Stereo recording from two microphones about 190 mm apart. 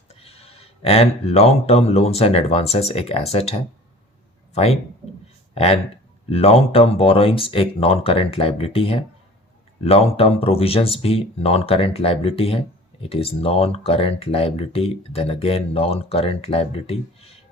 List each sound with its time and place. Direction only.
0.1 s speech: 30° left (ahead or behind)
6.3 s speech: 30° left (ahead or behind)